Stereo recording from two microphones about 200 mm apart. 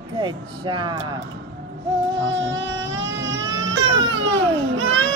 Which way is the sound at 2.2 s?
65° right (ahead or behind).